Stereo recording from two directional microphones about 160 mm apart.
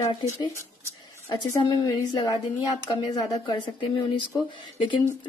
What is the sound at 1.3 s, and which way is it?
A woman's voice, 25° left (ahead or behind).